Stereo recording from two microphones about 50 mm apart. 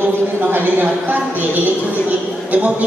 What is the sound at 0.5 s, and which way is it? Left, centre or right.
A woman's voice, right.